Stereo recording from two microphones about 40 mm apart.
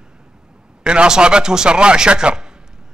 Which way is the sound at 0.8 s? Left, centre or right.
Right.